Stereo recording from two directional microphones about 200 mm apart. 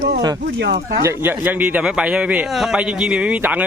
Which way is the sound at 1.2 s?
10° right (ahead or behind).